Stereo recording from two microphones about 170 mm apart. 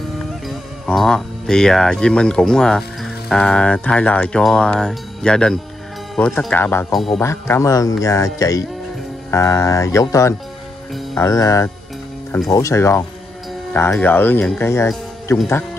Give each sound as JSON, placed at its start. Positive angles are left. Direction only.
{"t": 0.5, "sound": "speech", "side_deg": 0}